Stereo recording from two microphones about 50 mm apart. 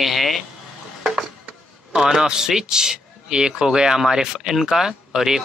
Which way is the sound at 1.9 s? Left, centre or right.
Centre.